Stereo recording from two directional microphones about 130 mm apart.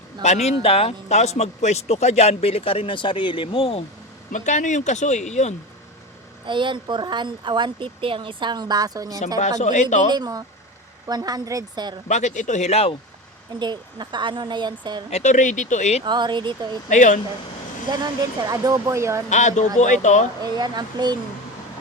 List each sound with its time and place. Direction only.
0.2 s speech: 60° left (ahead or behind); by 3.8 s 45° left (ahead or behind)
4.3 s speech: 70° left (ahead or behind)
6.4 s speech: 40° right (ahead or behind)
9.4 s speech: 65° left (ahead or behind)
10.1 s speech: 30° right (ahead or behind)
12.0 s speech: 65° left (ahead or behind)
13.6 s speech: 35° right (ahead or behind)
15.1 s speech: 65° left (ahead or behind)
16.0 s speech: 35° right (ahead or behind)
16.9 s speech: 75° left (ahead or behind)
17.9 s speech: 30° right (ahead or behind)
19.3 s speech: 70° left (ahead or behind)
20.4 s speech: 35° right (ahead or behind)